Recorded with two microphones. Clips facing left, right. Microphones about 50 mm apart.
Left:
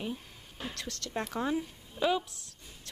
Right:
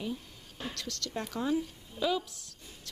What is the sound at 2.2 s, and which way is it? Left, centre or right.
Speech, right.